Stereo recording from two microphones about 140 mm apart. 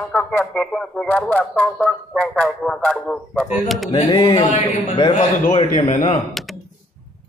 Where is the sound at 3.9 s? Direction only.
35° left (ahead or behind).